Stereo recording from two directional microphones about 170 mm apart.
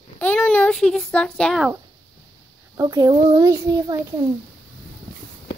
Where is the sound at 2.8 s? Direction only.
20° right (ahead or behind).